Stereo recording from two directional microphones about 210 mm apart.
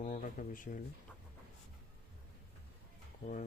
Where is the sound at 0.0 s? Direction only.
40° left (ahead or behind).